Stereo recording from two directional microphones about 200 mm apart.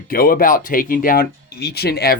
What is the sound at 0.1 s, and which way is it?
Speech, 45° left (ahead or behind).